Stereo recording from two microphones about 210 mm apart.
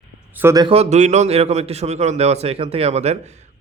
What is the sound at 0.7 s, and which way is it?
A man's voice, 30° right (ahead or behind).